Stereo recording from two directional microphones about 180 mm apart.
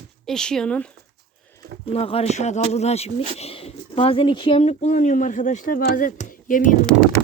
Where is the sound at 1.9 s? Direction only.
35° left (ahead or behind).